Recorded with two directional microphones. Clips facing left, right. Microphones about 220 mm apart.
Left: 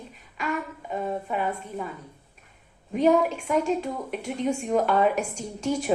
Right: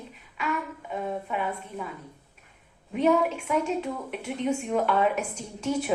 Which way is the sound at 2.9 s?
40° left (ahead or behind).